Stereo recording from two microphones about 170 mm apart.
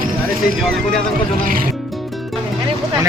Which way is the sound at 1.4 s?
55° right (ahead or behind).